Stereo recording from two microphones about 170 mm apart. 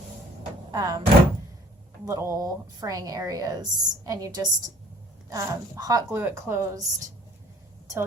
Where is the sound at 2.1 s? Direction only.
20° right (ahead or behind).